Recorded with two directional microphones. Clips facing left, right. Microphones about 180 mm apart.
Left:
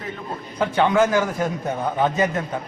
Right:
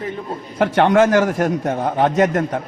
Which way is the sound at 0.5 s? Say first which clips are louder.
Right 4 dB; 70° right (ahead or behind).